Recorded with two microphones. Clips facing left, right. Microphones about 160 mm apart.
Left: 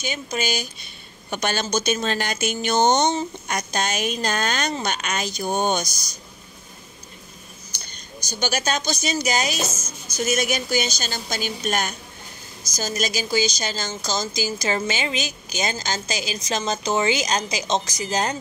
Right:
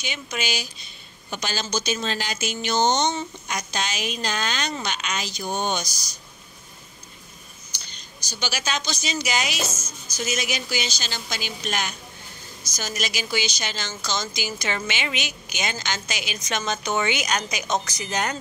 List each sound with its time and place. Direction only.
0.0 s speech: 45° left (ahead or behind)
1.3 s speech: 55° left (ahead or behind)
7.8 s speech: 50° left (ahead or behind); by 18.4 s 30° left (ahead or behind)